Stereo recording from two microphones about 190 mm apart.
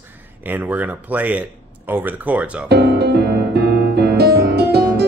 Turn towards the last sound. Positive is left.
turn(degrees=-60)  # may be behind; listen again after turning